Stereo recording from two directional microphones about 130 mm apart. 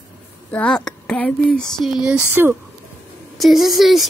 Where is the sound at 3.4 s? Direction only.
Centre (ahead or behind).